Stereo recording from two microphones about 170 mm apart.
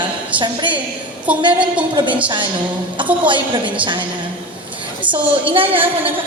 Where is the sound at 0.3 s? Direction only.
30° right (ahead or behind).